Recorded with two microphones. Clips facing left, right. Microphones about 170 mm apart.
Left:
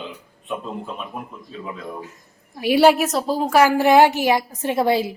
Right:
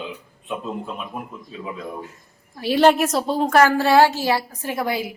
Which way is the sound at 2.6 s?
10° left (ahead or behind).